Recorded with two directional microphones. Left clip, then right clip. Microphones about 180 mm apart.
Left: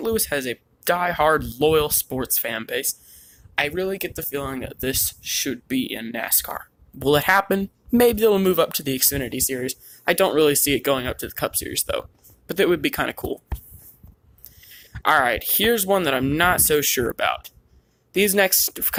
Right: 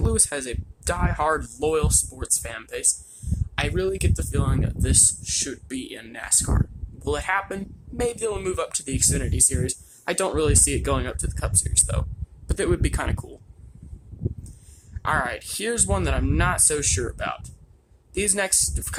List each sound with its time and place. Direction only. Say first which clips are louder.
0.0 s speech: left 3 dB; 5° left (ahead or behind)
7.0 s speech: left 7 dB; 30° left (ahead or behind); by 13.2 s 10° left (ahead or behind)
14.9 s speech: left 6 dB; 20° left (ahead or behind)